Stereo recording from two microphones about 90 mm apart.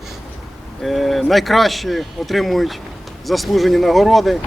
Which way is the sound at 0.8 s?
Centre (ahead or behind).